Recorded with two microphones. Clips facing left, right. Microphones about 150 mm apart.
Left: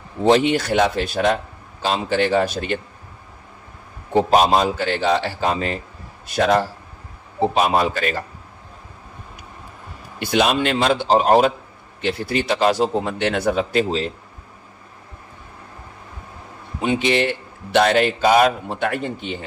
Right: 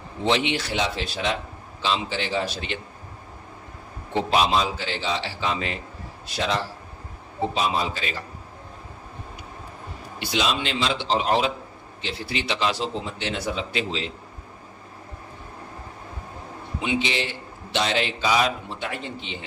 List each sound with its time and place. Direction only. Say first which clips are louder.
0.2 s a man's voice: left 8 dB; 45° left (ahead or behind)
4.1 s a man's voice: left 6 dB; 45° left (ahead or behind)
10.1 s a man's voice: left 7 dB; 55° left (ahead or behind)
16.8 s a man's voice: left 7 dB; 50° left (ahead or behind)